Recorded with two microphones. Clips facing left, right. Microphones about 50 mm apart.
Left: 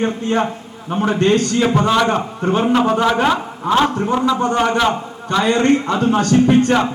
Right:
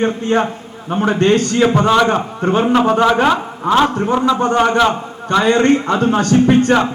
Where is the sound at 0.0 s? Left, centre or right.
Right.